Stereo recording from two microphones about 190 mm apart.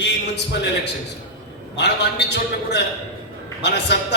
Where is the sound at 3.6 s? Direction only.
65° left (ahead or behind).